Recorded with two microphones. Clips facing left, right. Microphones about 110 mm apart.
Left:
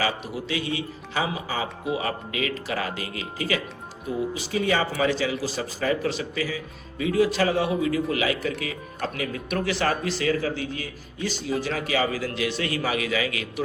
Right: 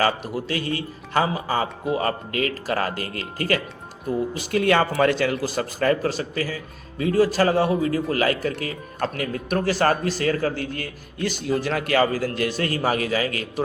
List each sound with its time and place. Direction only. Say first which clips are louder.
0.0 s a man's voice: right 5 dB; 45° right (ahead or behind)
4.4 s a man's voice: right 6 dB; 60° right (ahead or behind)
12.0 s a man's voice: right 3 dB; 45° right (ahead or behind)